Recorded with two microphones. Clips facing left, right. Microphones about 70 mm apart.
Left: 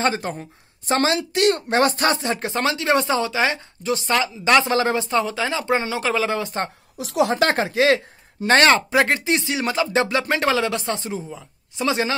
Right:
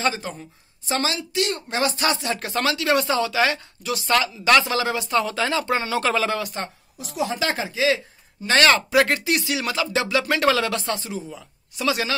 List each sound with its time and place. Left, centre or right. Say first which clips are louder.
0.0 s speech: left 3 dB; left
2.2 s speech: left 2 dB; left
4.7 s speech: left 2 dB; left
7.0 s a woman's voice: left 6 dB; left
7.2 s speech: left 6 dB; left
8.5 s speech: left 2 dB; left